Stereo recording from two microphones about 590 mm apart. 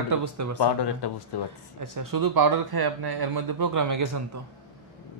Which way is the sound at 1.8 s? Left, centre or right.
Right.